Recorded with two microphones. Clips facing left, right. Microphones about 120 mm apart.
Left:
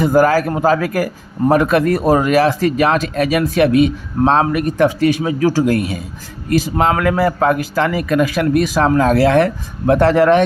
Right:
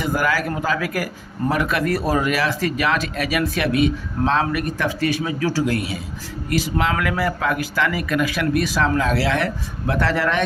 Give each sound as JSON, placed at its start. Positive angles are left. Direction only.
{"t": 0.0, "sound": "speech", "side_deg": 40}
{"t": 5.6, "sound": "speech", "side_deg": 45}